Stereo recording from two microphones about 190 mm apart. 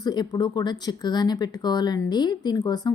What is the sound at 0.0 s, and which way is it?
A woman's voice, 20° left (ahead or behind).